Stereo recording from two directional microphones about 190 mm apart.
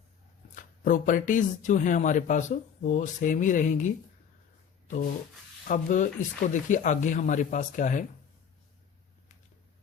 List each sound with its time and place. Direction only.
0.5 s speech: 45° left (ahead or behind)
5.6 s speech: 45° left (ahead or behind)